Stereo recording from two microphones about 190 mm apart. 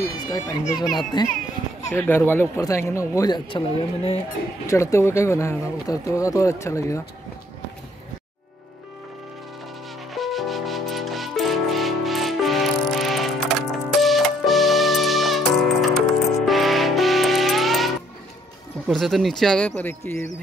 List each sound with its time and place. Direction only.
0.3 s a child's voice: 20° left (ahead or behind)
4.6 s speech: 15° left (ahead or behind)
10.1 s music: centre (ahead or behind)
18.9 s speech: centre (ahead or behind)